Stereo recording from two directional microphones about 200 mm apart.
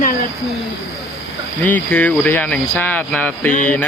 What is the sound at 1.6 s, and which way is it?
Speech, 10° left (ahead or behind).